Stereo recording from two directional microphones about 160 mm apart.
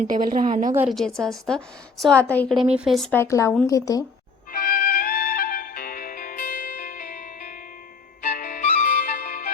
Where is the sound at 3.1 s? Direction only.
15° left (ahead or behind).